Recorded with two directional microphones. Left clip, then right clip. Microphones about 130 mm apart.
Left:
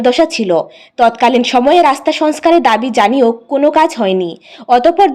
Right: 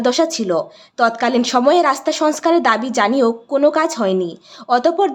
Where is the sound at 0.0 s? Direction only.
15° left (ahead or behind).